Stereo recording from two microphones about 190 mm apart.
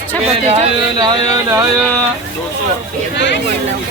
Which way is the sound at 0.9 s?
20° right (ahead or behind).